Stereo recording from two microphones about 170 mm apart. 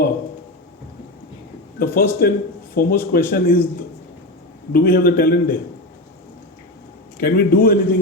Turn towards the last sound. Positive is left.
turn(degrees=60)  # may be behind; listen again after turning